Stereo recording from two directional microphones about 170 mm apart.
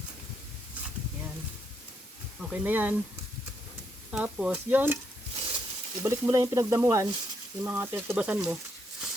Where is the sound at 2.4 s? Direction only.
10° right (ahead or behind).